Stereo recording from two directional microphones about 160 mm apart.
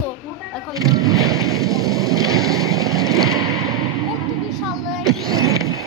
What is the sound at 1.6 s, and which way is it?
Vehicle, 20° right (ahead or behind).